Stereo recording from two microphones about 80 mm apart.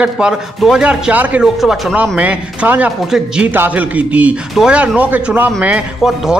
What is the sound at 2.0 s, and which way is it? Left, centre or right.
Speech, centre.